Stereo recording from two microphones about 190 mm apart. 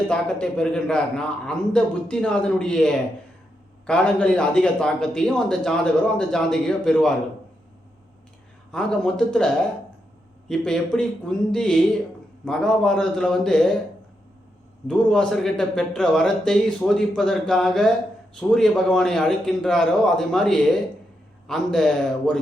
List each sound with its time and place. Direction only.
0.1 s speech: 5° left (ahead or behind)
8.7 s speech: 5° left (ahead or behind)
10.5 s speech: 5° left (ahead or behind)
14.8 s speech: 5° left (ahead or behind)